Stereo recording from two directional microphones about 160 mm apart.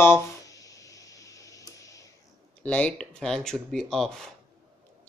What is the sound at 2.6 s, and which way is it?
Speech, 5° left (ahead or behind).